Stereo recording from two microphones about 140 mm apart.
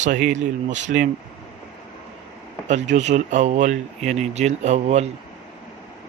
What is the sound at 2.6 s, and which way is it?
Speech, 55° right (ahead or behind).